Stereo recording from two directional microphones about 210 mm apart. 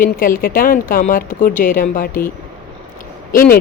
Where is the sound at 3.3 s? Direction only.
45° left (ahead or behind).